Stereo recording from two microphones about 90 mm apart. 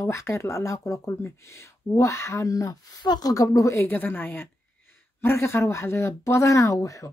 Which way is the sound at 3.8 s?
20° left (ahead or behind).